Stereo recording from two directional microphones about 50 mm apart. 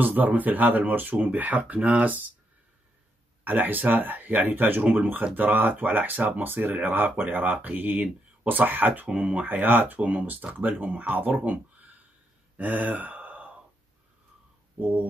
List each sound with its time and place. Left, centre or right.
0.0 s speech: right
3.4 s speech: right
11.4 s a sound: right
12.5 s gasp: right
14.8 s speech: right